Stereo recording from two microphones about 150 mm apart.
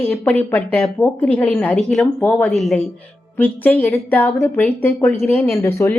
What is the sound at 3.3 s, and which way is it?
A woman's voice, 10° left (ahead or behind).